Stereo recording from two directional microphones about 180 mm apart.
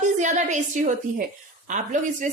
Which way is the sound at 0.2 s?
40° right (ahead or behind).